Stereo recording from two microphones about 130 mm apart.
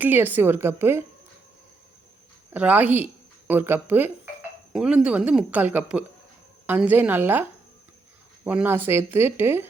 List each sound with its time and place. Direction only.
0.0 s a woman's voice: 15° right (ahead or behind)
2.5 s a woman's voice: 10° right (ahead or behind)
8.4 s a woman's voice: 15° right (ahead or behind)